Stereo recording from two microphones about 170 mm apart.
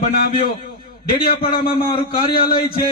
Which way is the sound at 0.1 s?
60° left (ahead or behind).